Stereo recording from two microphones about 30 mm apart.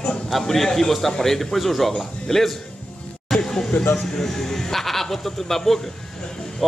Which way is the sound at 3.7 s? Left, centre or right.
Left.